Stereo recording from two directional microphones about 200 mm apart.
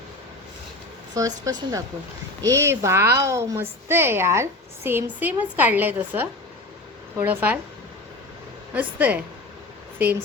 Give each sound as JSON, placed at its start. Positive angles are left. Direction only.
{"t": 1.1, "sound": "a woman's voice", "side_deg": -15}
{"t": 8.7, "sound": "a woman's voice", "side_deg": -10}